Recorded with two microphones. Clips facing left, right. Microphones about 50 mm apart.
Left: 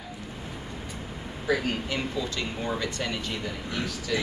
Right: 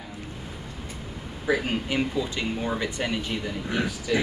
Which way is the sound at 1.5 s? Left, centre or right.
Centre.